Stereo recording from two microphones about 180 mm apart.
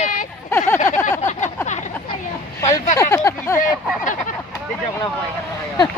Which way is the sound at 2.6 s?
15° left (ahead or behind).